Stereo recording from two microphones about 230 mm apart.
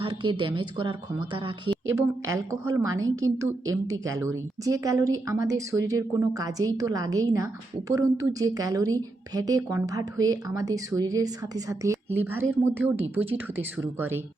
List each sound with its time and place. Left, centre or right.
0.0 s a woman's voice: right
3.2 s a woman's voice: right
4.0 s a woman's voice: centre